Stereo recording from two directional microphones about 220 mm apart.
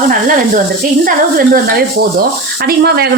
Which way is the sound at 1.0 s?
40° right (ahead or behind).